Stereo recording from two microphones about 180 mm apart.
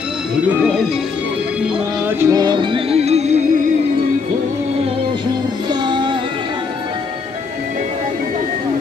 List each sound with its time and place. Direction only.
2.1 s music: 25° right (ahead or behind)
5.7 s music: 25° right (ahead or behind)